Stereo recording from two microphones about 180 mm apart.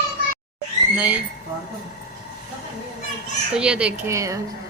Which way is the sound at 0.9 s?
10° right (ahead or behind).